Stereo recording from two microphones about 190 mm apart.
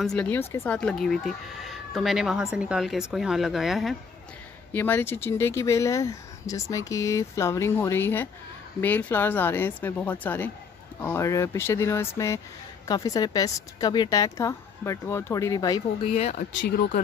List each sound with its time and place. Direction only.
0.0 s speech: 5° left (ahead or behind)
4.7 s speech: 10° left (ahead or behind)
16.1 s speech: 35° left (ahead or behind)
16.5 s speech: 60° left (ahead or behind)